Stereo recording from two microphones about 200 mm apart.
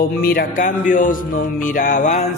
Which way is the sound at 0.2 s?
45° left (ahead or behind).